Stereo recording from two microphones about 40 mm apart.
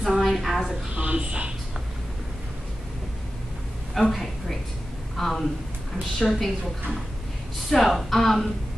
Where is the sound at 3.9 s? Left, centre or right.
Centre.